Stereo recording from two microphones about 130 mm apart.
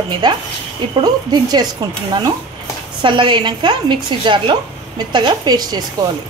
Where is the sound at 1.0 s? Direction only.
30° right (ahead or behind).